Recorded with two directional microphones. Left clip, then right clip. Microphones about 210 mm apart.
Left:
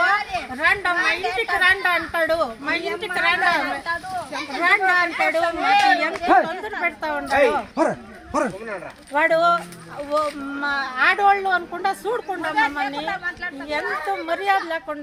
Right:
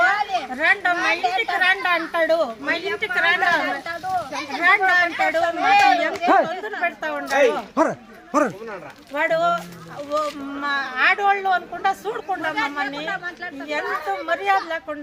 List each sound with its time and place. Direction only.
0.5 s speech: centre (ahead or behind)
7.8 s speech: 55° right (ahead or behind)
9.1 s speech: centre (ahead or behind)